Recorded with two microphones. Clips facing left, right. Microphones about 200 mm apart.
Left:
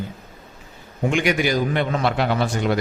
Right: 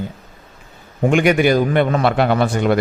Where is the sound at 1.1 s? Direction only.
55° right (ahead or behind).